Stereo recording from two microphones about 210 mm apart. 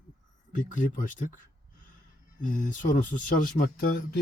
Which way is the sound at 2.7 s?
40° left (ahead or behind).